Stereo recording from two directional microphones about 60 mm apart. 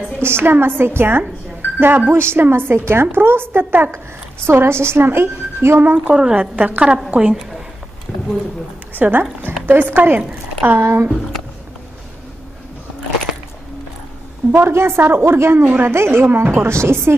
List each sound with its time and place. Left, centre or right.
0.2 s a woman's voice: right
6.1 s a woman's voice: centre
8.1 s a sound: left
8.9 s a woman's voice: right
14.5 s a woman's voice: right
15.6 s a woman's voice: right
15.9 s a woman's voice: right